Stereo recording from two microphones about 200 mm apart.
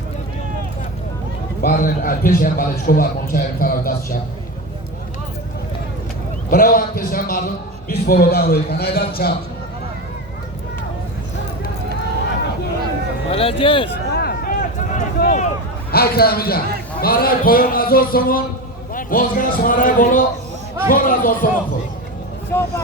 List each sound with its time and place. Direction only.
1.6 s a man's voice: 45° left (ahead or behind)
6.5 s a man's voice: 45° left (ahead or behind)
13.3 s speech: 30° left (ahead or behind)
14.1 s a sound: 50° left (ahead or behind)
15.9 s a man's voice: 50° left (ahead or behind)
22.5 s speech: 10° left (ahead or behind)